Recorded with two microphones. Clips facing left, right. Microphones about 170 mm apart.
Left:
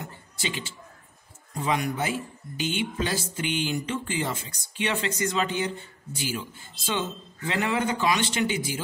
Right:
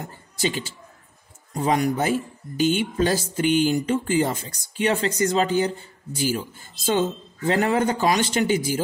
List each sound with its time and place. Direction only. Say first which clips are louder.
0.0 s speech: right 7 dB; 40° right (ahead or behind)